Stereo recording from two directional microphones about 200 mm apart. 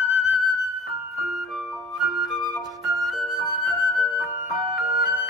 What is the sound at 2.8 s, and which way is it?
Flute, centre (ahead or behind).